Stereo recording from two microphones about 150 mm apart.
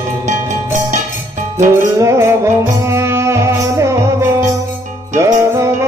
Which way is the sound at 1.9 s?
20° right (ahead or behind).